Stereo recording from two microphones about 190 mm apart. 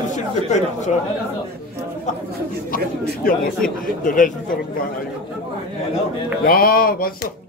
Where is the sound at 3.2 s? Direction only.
50° left (ahead or behind).